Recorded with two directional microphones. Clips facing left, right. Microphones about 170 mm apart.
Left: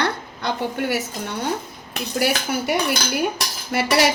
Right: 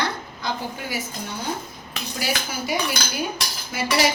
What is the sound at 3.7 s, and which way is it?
Speech, 65° left (ahead or behind).